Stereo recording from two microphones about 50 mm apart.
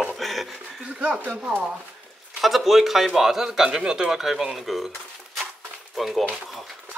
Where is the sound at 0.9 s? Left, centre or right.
Right.